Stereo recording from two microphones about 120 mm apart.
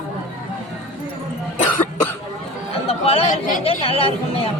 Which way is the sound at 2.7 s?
55° left (ahead or behind).